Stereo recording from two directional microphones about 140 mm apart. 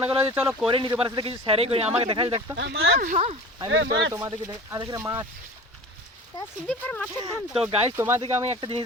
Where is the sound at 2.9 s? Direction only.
80° right.